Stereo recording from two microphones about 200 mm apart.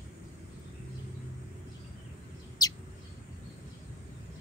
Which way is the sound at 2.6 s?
20° left (ahead or behind).